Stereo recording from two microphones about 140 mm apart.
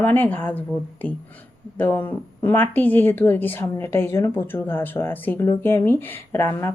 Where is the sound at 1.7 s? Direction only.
15° left (ahead or behind).